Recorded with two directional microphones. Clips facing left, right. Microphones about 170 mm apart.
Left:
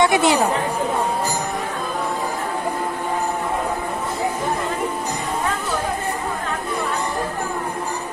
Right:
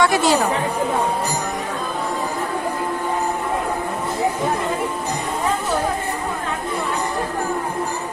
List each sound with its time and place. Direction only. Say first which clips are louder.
0.0 s chatter: left 1 dB; 20° left (ahead or behind)